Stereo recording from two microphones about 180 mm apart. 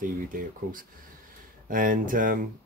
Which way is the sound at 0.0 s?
50° right (ahead or behind).